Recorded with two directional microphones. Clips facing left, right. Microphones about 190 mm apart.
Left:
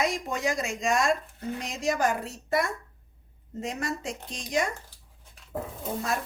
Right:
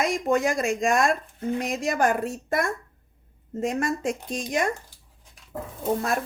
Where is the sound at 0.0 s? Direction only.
50° right (ahead or behind).